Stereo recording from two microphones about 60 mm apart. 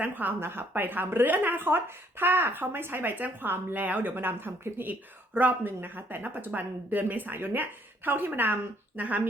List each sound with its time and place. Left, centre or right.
0.0 s speech: right